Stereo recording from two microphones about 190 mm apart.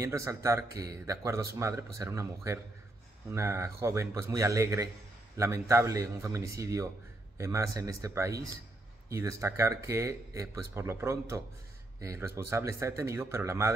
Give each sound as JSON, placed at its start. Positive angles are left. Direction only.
{"t": 0.0, "sound": "speech", "side_deg": -15}